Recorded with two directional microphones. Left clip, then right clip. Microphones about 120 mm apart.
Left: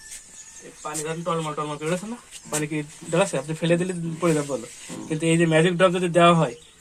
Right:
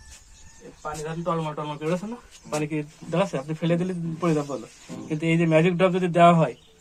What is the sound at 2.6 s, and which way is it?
Speech, 45° left (ahead or behind).